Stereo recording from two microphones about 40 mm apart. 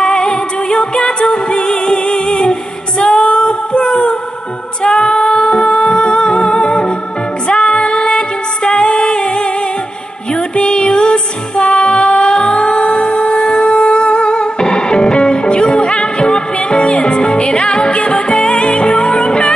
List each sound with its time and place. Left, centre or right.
0.0 s music: centre
3.0 s female singing: centre
5.5 s music: centre
17.9 s music: left
18.3 s music: centre